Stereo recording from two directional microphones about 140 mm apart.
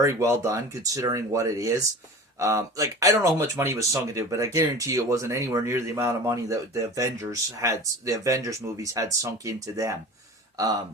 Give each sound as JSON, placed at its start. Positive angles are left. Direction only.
{"t": 0.0, "sound": "speech", "side_deg": -25}